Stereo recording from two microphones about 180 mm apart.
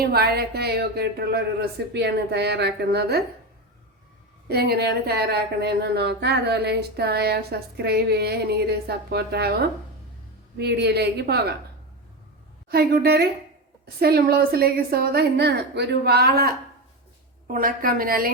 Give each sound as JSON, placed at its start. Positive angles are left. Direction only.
{"t": 0.0, "sound": "a woman's voice", "side_deg": -60}
{"t": 4.4, "sound": "speech", "side_deg": -60}
{"t": 12.6, "sound": "a woman's voice", "side_deg": -60}